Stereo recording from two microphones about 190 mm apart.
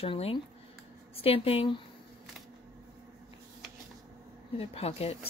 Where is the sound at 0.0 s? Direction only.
30° left (ahead or behind).